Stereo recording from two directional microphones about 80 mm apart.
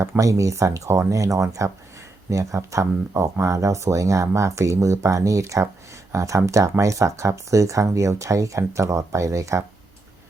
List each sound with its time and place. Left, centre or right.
0.0 s speech: right